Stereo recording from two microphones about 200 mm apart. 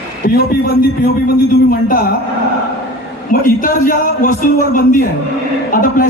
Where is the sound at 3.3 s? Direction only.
45° left (ahead or behind).